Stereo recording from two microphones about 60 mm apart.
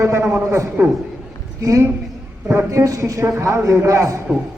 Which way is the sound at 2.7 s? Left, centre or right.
Right.